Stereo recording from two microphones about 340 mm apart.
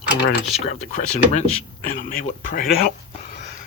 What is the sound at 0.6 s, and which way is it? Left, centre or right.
Speech, centre.